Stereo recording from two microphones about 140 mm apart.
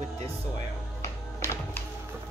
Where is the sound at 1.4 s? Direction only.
15° left (ahead or behind).